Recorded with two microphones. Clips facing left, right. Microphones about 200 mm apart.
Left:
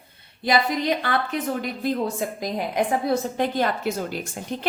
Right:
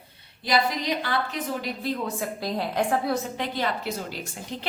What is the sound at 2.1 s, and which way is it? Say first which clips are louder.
A woman's voice: left 2 dB; 15° left (ahead or behind).